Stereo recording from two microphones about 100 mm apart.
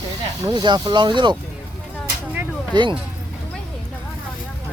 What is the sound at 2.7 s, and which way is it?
Speech, 50° right (ahead or behind).